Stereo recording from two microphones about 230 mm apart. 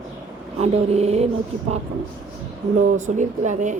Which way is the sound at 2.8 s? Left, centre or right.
Right.